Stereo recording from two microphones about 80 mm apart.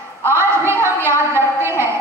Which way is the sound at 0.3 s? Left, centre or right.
Right.